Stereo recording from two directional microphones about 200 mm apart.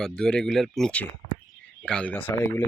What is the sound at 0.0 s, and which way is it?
Speech, 5° left (ahead or behind).